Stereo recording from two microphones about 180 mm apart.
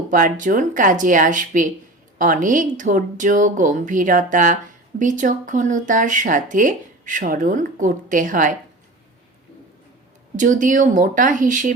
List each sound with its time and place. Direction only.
0.1 s speech: 45° right (ahead or behind)
10.3 s speech: 45° right (ahead or behind)